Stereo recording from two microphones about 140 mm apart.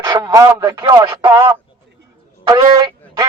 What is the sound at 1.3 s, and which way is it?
A man's voice, 20° right (ahead or behind).